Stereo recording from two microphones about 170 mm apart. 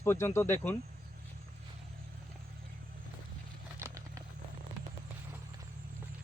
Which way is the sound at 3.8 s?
15° right (ahead or behind).